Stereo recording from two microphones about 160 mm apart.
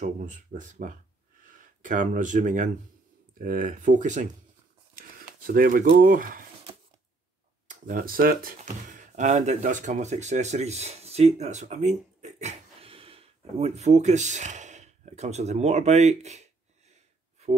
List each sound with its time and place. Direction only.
0.0 s speech: 55° right (ahead or behind)
5.5 s speech: 60° right (ahead or behind)
7.6 s speech: 55° right (ahead or behind)